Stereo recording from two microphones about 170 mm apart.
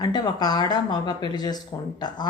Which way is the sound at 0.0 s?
25° left (ahead or behind).